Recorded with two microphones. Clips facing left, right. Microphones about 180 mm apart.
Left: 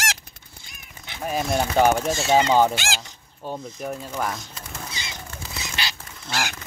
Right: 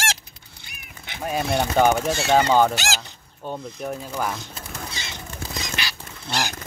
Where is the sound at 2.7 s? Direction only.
40° right (ahead or behind).